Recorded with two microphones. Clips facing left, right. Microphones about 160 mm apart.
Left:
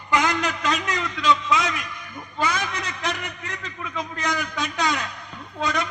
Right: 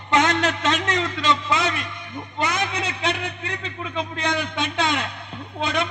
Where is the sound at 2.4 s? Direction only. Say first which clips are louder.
Right 1 dB; 20° right (ahead or behind).